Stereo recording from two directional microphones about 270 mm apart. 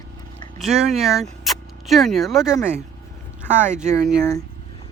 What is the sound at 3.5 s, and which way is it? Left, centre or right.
Speech, right.